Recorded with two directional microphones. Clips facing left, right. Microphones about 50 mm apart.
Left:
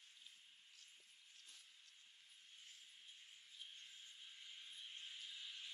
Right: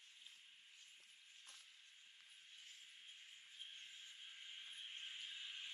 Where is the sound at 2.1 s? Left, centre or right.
Right.